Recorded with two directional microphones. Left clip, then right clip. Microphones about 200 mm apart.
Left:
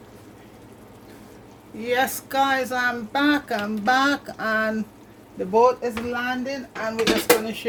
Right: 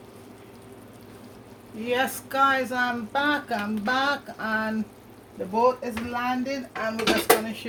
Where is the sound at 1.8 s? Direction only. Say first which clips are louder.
Left 3 dB; 30° left (ahead or behind).